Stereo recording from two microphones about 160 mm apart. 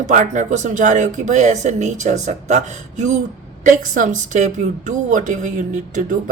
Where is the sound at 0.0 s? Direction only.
50° right (ahead or behind).